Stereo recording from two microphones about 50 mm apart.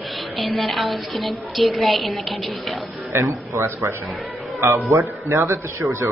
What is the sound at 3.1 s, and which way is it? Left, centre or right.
Speech, right.